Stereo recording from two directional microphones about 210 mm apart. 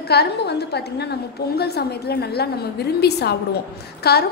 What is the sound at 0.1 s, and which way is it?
A woman's voice, 50° left (ahead or behind).